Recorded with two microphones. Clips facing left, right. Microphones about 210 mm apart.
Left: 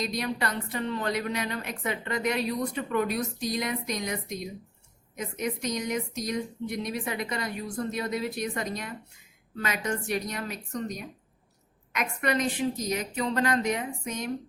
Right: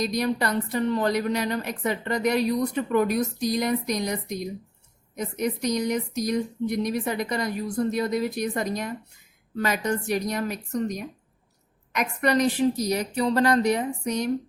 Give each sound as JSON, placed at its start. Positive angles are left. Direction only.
{"t": 0.0, "sound": "speech", "side_deg": -40}